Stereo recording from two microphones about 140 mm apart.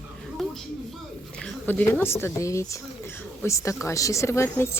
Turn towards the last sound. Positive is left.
turn(degrees=20)  # may be behind; listen again after turning